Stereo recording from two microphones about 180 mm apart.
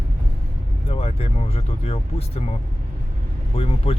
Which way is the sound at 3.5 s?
30° left (ahead or behind).